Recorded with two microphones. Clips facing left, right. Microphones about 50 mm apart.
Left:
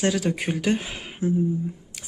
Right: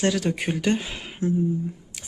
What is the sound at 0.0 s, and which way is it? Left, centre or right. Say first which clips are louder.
Speech: even; centre.